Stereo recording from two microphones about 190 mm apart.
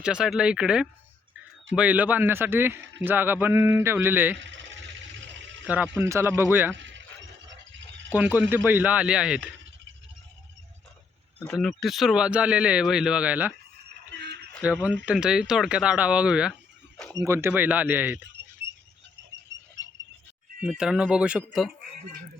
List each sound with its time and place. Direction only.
0.0 s speech: 5° right (ahead or behind)
4.4 s a sound: 75° right (ahead or behind)
5.6 s speech: 5° right (ahead or behind)
6.7 s a sound: 75° right (ahead or behind)
8.1 s speech: 10° right (ahead or behind)
11.4 s speech: centre (ahead or behind)
14.1 s a sound: 60° right (ahead or behind)
14.6 s speech: 10° right (ahead or behind)
20.7 s speech: 5° right (ahead or behind)